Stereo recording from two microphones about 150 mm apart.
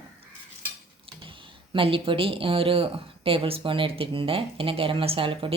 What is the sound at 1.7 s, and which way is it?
A woman's voice, 40° right (ahead or behind).